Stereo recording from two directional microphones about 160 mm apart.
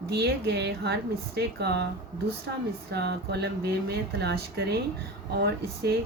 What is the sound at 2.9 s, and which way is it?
A woman's voice, 90° right.